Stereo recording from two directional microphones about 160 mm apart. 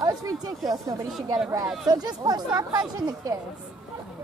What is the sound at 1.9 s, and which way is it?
Speech, 25° right (ahead or behind).